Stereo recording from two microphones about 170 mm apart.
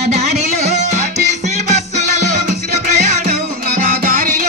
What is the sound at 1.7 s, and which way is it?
Music, 45° right (ahead or behind).